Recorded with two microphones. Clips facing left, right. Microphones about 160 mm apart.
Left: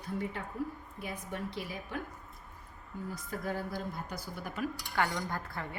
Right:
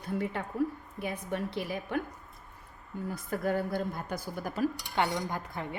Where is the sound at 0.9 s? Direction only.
60° right (ahead or behind).